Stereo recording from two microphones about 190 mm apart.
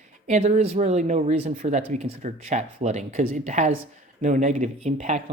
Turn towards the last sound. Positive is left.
turn(degrees=-35)  # may be behind; listen again after turning